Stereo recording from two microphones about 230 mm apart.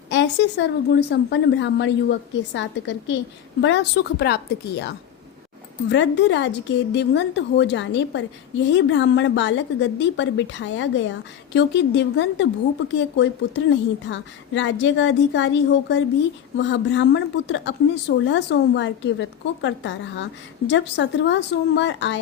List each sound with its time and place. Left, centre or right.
0.1 s speech: left